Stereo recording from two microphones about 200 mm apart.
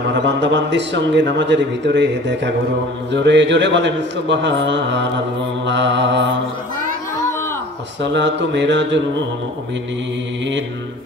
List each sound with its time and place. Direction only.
0.2 s a man's voice: 60° right (ahead or behind)
8.0 s a man's voice: 60° right (ahead or behind)